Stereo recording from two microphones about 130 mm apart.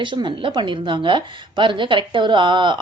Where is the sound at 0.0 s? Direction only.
35° right (ahead or behind).